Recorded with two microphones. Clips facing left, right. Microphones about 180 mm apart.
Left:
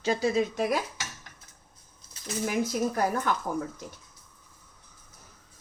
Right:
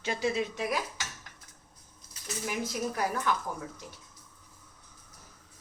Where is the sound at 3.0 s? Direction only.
50° left (ahead or behind).